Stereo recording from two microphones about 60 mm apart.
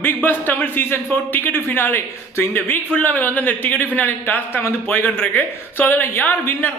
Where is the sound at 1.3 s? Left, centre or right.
Left.